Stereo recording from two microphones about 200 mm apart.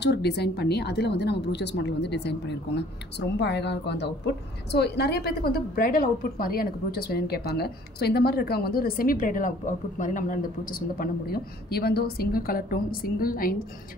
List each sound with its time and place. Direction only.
0.0 s a woman's voice: 55° left (ahead or behind)